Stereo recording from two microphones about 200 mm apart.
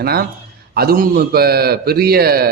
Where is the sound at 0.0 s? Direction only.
50° right (ahead or behind).